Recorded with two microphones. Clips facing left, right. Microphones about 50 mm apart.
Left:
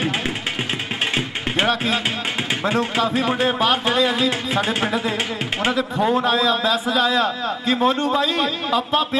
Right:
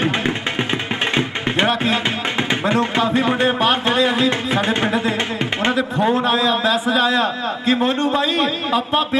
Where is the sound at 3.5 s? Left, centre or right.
Right.